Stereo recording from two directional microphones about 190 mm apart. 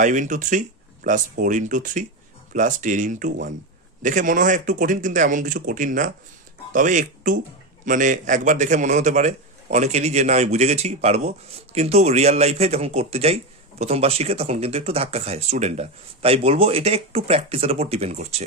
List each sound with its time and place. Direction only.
0.0 s speech: 40° right (ahead or behind)